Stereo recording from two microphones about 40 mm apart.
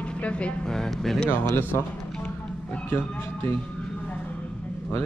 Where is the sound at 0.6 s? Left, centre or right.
Centre.